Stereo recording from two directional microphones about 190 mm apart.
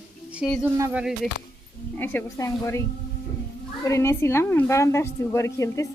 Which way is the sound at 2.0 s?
10° left (ahead or behind).